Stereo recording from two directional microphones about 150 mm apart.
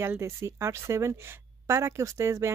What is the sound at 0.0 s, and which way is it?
A woman's voice, 15° right (ahead or behind).